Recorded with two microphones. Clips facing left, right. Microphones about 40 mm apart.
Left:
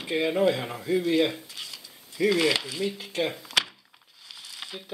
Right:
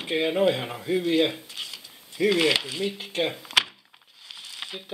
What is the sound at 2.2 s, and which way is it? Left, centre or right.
Speech, right.